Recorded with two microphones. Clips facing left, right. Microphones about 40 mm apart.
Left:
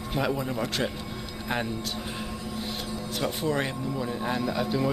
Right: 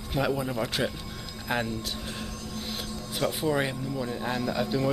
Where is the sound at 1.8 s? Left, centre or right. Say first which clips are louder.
Left 2 dB; centre.